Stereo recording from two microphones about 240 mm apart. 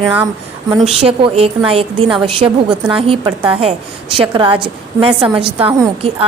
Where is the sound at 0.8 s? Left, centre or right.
Right.